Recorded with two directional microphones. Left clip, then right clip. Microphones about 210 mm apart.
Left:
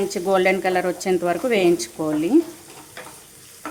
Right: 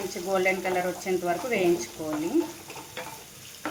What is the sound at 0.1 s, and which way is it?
Speech, 60° left (ahead or behind).